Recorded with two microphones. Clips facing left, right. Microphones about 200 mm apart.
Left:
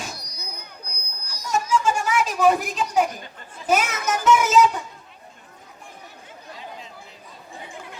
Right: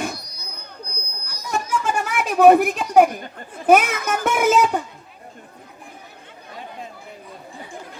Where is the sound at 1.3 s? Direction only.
60° right (ahead or behind).